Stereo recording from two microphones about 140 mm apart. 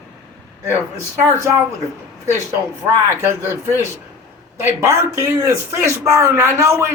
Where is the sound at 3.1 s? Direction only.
20° right (ahead or behind).